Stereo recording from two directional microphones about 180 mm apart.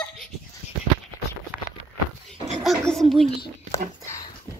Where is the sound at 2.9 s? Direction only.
Centre (ahead or behind).